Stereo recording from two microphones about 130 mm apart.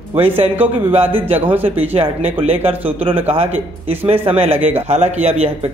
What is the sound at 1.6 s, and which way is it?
Speech, 45° right (ahead or behind).